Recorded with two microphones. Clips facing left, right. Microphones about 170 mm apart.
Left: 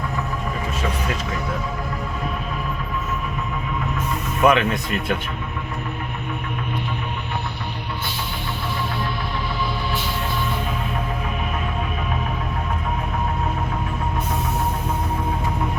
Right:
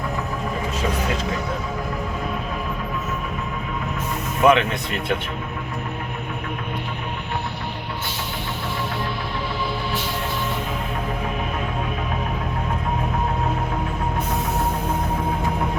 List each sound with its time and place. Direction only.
4.4 s speech: 25° right (ahead or behind)